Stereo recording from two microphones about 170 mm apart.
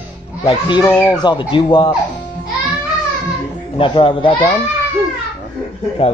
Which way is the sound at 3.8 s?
30° left (ahead or behind).